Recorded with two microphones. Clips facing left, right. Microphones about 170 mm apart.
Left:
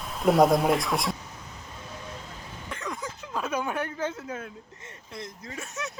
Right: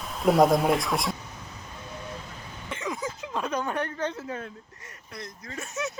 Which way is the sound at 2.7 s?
5° right (ahead or behind).